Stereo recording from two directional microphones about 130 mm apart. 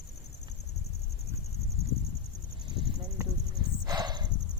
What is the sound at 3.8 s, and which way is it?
Dog, 35° right (ahead or behind).